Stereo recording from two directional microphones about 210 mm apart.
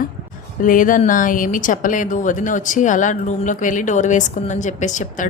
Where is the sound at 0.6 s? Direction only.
40° left (ahead or behind).